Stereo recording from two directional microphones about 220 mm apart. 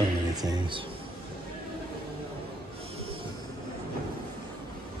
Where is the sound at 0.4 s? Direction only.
20° right (ahead or behind).